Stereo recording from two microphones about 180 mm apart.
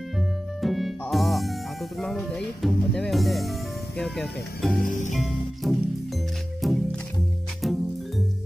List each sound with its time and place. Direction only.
0.6 s music: centre (ahead or behind)
4.8 s music: 45° left (ahead or behind)
5.1 s music: centre (ahead or behind)